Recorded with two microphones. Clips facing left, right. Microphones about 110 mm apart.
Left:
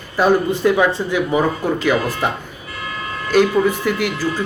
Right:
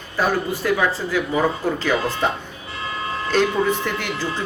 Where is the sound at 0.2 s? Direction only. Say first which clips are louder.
Left 6 dB; 20° left (ahead or behind).